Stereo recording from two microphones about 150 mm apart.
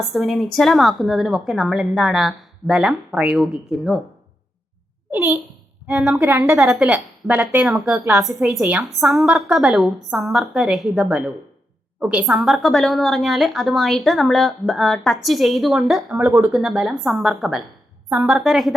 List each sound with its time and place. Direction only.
0.1 s a woman's voice: centre (ahead or behind)
5.9 s a woman's voice: centre (ahead or behind)
6.1 s a woman's voice: 20° right (ahead or behind)
6.6 s a woman's voice: 5° right (ahead or behind)
16.1 s speech: 20° right (ahead or behind)
16.5 s a woman's voice: centre (ahead or behind)